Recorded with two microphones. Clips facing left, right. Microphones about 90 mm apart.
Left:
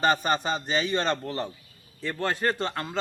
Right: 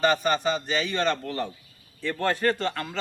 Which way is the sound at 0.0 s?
35° left (ahead or behind).